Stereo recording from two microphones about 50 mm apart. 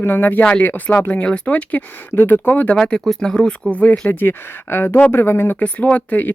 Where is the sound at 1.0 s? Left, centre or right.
Left.